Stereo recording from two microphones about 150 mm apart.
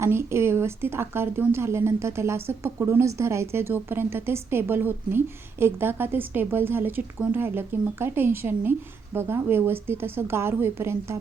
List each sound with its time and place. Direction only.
0.0 s speech: 15° right (ahead or behind)